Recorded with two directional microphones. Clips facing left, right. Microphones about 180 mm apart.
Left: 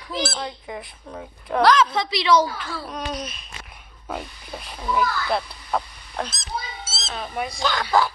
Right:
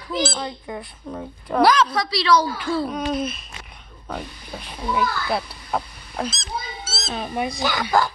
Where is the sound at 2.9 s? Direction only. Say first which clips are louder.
Right 6 dB; 5° right (ahead or behind).